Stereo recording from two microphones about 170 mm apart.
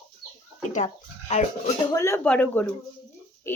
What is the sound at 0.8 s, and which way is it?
Speech, 40° left (ahead or behind).